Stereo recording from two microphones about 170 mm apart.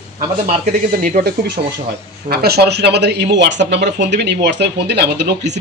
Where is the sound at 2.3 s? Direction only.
70° right (ahead or behind); by 5.5 s 85° right.